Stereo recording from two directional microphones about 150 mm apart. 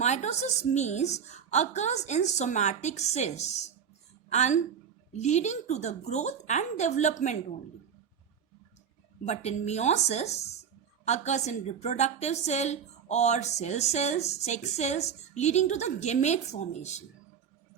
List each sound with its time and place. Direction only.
0.0 s a woman's voice: 50° left (ahead or behind)
9.2 s a woman's voice: 50° left (ahead or behind)